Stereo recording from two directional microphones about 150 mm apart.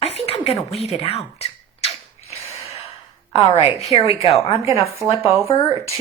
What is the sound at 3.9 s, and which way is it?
Speech, 35° left (ahead or behind).